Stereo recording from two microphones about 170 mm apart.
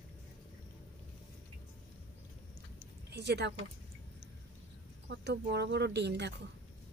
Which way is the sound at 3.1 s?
80° right.